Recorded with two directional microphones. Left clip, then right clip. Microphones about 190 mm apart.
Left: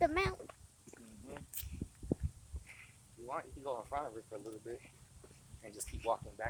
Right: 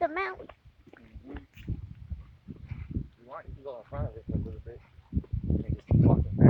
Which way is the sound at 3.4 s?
85° left.